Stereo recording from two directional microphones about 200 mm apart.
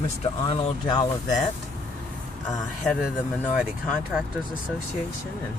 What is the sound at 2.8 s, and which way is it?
Speech, centre (ahead or behind).